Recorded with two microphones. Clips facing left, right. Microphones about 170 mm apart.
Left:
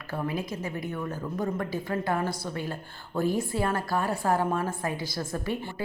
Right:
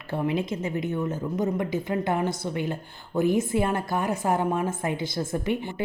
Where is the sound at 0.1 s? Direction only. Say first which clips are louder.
Right 5 dB; 25° right (ahead or behind).